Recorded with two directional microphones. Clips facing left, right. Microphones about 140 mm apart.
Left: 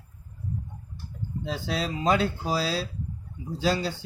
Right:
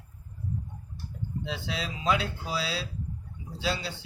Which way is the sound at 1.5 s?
45° left (ahead or behind).